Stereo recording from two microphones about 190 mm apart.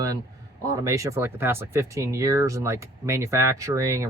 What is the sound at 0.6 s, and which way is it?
Speech, 20° right (ahead or behind).